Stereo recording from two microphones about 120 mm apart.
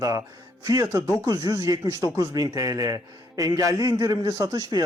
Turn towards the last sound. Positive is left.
turn(degrees=-30)  # may be behind; listen again after turning